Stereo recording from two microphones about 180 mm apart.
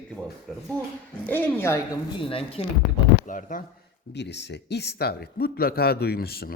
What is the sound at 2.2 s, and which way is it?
Speech, 30° left (ahead or behind).